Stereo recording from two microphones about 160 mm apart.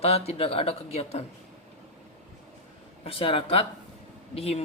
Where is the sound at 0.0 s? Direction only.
40° left (ahead or behind).